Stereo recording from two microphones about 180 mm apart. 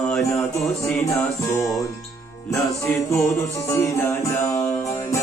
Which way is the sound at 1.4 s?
15° left (ahead or behind).